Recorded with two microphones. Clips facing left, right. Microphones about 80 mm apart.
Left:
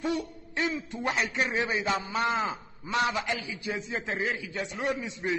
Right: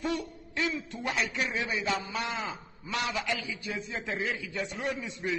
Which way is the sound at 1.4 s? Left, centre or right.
Left.